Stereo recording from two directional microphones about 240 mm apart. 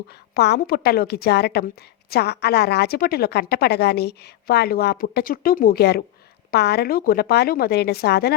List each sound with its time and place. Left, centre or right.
0.3 s a woman's voice: left